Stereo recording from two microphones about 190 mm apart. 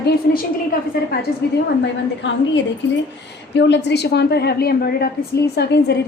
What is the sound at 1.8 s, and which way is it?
A woman's voice, 75° left (ahead or behind).